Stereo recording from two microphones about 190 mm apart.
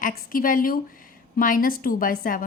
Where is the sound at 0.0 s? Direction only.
50° left (ahead or behind).